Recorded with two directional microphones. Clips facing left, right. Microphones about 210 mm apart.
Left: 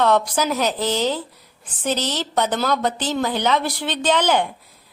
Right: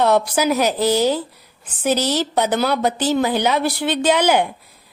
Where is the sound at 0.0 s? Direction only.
10° right (ahead or behind).